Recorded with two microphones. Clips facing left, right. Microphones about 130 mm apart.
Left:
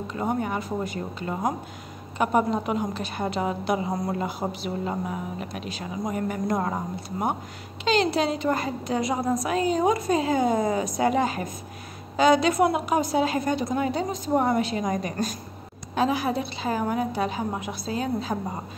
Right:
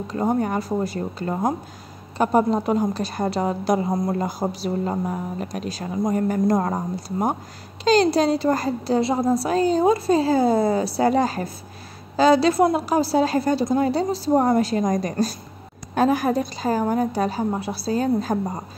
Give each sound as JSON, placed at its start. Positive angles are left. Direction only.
{"t": 0.1, "sound": "a woman's voice", "side_deg": -35}
{"t": 7.8, "sound": "a woman's voice", "side_deg": -40}
{"t": 15.9, "sound": "a woman's voice", "side_deg": -45}